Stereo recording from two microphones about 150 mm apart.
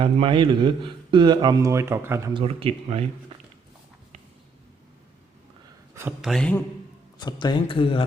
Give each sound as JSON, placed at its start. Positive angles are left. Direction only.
{"t": 0.0, "sound": "speech", "side_deg": -35}
{"t": 2.3, "sound": "speech", "side_deg": -40}
{"t": 5.9, "sound": "a sound", "side_deg": -15}
{"t": 6.2, "sound": "a man's voice", "side_deg": 5}
{"t": 7.2, "sound": "speech", "side_deg": 30}